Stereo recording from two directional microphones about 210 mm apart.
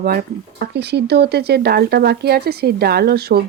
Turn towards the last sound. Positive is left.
turn(degrees=-45)  # may be behind; listen again after turning